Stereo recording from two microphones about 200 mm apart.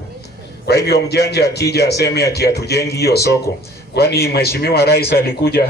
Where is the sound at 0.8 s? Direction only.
55° left (ahead or behind).